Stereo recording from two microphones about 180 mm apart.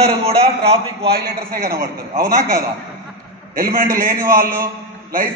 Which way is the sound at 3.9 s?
15° right (ahead or behind).